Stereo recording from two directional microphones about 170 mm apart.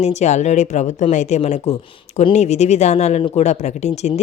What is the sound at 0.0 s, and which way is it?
Speech, 40° left (ahead or behind).